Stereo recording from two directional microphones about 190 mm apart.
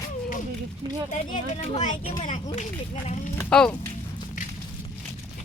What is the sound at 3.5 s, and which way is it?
Speech, 5° left (ahead or behind).